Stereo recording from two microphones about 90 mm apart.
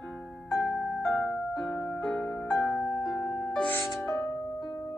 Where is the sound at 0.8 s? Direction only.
5° left (ahead or behind).